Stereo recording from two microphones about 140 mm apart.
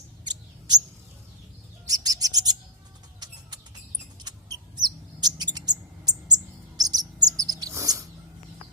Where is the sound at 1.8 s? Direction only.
25° right (ahead or behind).